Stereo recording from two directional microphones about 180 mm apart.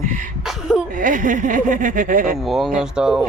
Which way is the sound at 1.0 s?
45° right (ahead or behind).